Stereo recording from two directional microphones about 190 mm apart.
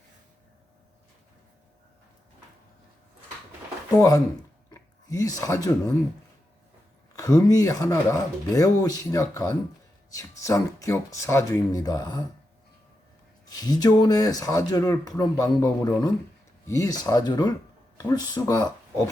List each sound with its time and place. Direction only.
3.9 s speech: 20° left (ahead or behind)
4.7 s a sound: 20° left (ahead or behind)
7.2 s speech: 20° left (ahead or behind)
13.5 s speech: 20° left (ahead or behind)